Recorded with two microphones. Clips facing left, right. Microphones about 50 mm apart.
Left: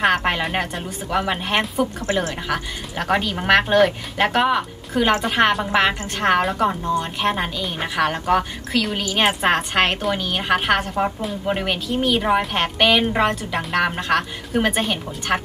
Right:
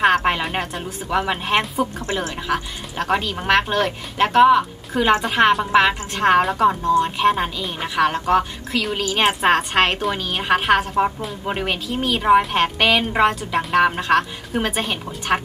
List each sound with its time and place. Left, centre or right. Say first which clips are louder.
0.0 s a woman's voice: right 2 dB; centre
3.1 s a woman's voice: left 1 dB; centre
7.2 s a woman's voice: right 3 dB; centre